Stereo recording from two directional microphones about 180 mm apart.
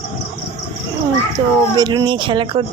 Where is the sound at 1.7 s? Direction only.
20° right (ahead or behind).